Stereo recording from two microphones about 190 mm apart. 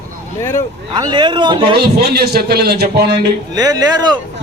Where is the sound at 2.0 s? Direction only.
55° right (ahead or behind).